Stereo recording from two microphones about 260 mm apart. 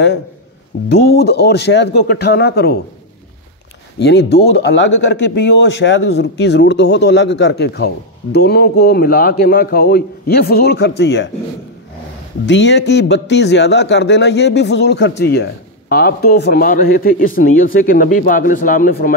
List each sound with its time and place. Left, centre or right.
0.8 s speech: left
4.0 s speech: left
12.4 s speech: left